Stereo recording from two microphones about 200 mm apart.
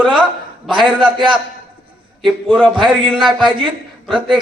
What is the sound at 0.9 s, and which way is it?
Speech, 25° right (ahead or behind).